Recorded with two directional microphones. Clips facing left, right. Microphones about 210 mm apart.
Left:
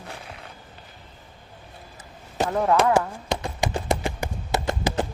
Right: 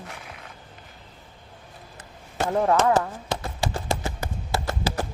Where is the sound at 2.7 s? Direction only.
15° left (ahead or behind).